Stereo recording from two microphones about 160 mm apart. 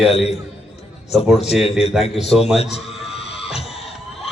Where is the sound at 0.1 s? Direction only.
40° left (ahead or behind).